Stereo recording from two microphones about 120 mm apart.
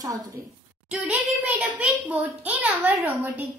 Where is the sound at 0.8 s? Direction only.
10° right (ahead or behind).